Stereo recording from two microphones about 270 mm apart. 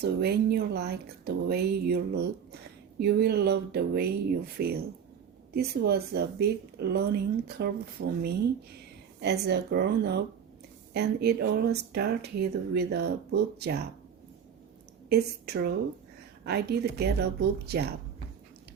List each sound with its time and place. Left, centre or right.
0.0 s speech: right
9.2 s speech: right
15.1 s speech: right